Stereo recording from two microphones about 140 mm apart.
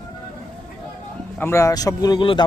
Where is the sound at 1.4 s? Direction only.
20° left (ahead or behind).